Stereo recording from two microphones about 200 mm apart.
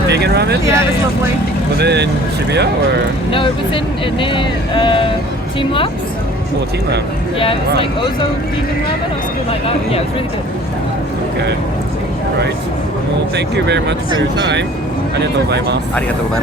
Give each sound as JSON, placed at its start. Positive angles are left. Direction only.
{"t": 0.1, "sound": "speech", "side_deg": -55}
{"t": 0.6, "sound": "speech", "side_deg": -10}
{"t": 1.8, "sound": "speech", "side_deg": -55}
{"t": 4.0, "sound": "speech", "side_deg": 25}
{"t": 7.8, "sound": "speech", "side_deg": 25}
{"t": 9.5, "sound": "speech", "side_deg": 30}
{"t": 13.3, "sound": "speech", "side_deg": -60}
{"t": 15.2, "sound": "speech", "side_deg": -60}